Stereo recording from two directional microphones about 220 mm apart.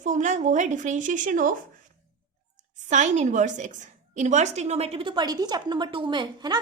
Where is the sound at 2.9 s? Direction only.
35° right (ahead or behind).